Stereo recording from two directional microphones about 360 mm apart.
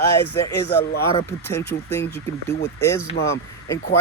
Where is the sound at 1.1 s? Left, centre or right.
Centre.